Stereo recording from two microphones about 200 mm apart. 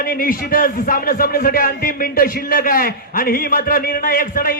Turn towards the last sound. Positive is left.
turn(degrees=45)  # may be behind; listen again after turning